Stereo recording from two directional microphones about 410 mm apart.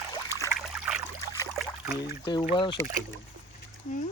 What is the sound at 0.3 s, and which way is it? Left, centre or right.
Trickle, centre.